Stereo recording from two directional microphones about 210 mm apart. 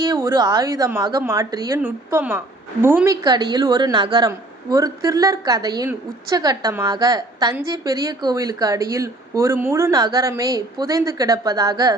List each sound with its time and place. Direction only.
0.1 s a woman's voice: 15° right (ahead or behind)